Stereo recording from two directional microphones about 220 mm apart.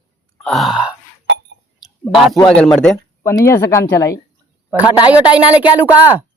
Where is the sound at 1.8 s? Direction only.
Centre (ahead or behind).